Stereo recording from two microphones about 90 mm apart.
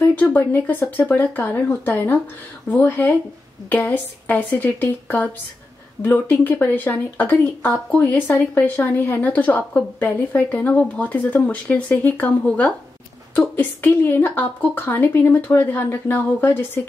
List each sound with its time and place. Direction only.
0.1 s speech: 20° left (ahead or behind)